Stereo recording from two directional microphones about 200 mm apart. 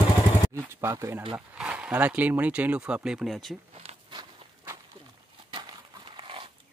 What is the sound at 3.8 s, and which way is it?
Walk, 30° right (ahead or behind).